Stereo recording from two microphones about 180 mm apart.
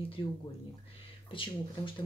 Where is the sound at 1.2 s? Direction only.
30° left (ahead or behind).